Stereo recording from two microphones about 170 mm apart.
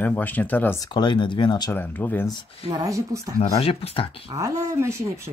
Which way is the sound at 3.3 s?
35° left (ahead or behind).